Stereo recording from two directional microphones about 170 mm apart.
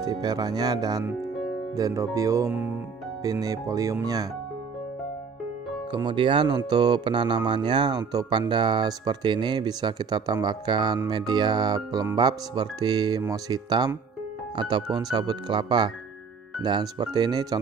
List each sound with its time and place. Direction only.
0.0 s speech: 25° right (ahead or behind)
5.9 s speech: 25° right (ahead or behind)